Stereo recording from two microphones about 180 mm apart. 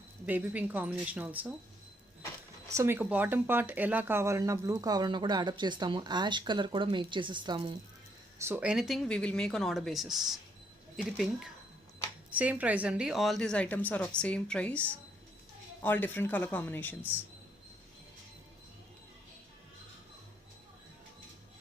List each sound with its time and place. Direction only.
0.3 s a woman's voice: 10° right (ahead or behind)
2.7 s speech: 15° right (ahead or behind)
8.4 s a woman's voice: 15° right (ahead or behind)
8.7 s a woman's voice: centre (ahead or behind)